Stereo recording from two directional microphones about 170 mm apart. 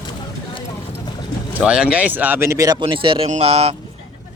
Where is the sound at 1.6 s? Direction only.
5° right (ahead or behind).